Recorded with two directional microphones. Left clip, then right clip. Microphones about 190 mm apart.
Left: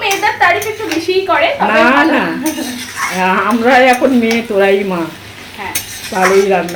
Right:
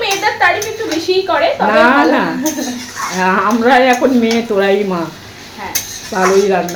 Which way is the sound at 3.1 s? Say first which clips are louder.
Even; centre (ahead or behind).